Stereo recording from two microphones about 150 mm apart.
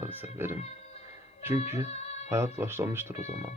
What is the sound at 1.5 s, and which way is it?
Speech, 45° left (ahead or behind).